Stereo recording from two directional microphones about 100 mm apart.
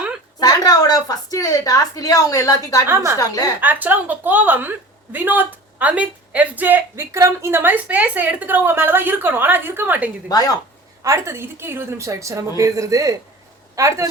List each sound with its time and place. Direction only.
0.3 s a woman's voice: 40° left (ahead or behind)
2.8 s a woman's voice: 25° right (ahead or behind)
3.2 s a woman's voice: 35° left (ahead or behind)
3.6 s a woman's voice: 15° right (ahead or behind)
10.2 s a woman's voice: 40° left (ahead or behind)
11.0 s a woman's voice: 30° right (ahead or behind)